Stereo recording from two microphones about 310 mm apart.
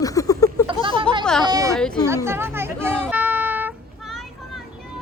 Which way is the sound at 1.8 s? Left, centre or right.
Centre.